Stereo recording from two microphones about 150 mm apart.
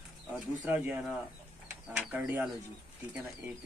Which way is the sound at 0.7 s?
10° right (ahead or behind).